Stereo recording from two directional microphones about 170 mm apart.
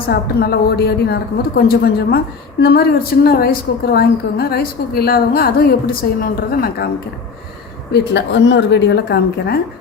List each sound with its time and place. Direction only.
0.1 s a woman's voice: 65° left (ahead or behind)
7.9 s a woman's voice: 90° left; by 9.6 s 75° left (ahead or behind)